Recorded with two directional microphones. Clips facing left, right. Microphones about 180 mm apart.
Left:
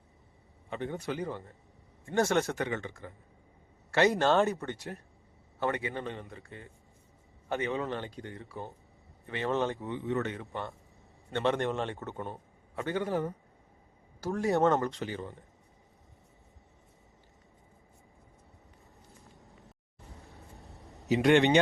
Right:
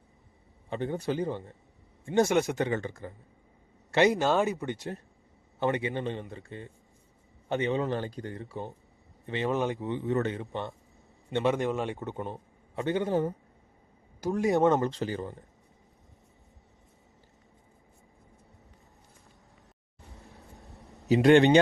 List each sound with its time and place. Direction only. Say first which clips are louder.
0.7 s speech: right 4 dB; 30° right (ahead or behind)
2.6 s a man's voice: right 4 dB; 35° right (ahead or behind)
4.1 s speech: even; centre (ahead or behind)
4.4 s a man's voice: right 2 dB; 15° right (ahead or behind)
7.8 s a man's voice: right 4 dB; 35° right (ahead or behind)
8.4 s speech: right 4 dB; 25° right (ahead or behind)
10.1 s a man's voice: right 3 dB; 40° right (ahead or behind)
10.3 s a man's voice: right 3 dB; 20° right (ahead or behind)
11.5 s speech: right 2 dB; 5° right (ahead or behind)
11.9 s speech: right 3 dB; 15° right (ahead or behind)
14.8 s a man's voice: right 4 dB; 35° right (ahead or behind)
21.1 s a man's voice: right 4 dB; 35° right (ahead or behind)